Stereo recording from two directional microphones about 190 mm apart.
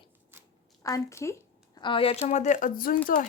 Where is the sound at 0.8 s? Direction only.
15° left (ahead or behind).